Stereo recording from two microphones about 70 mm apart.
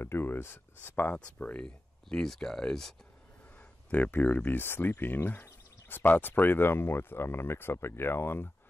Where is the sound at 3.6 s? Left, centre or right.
Left.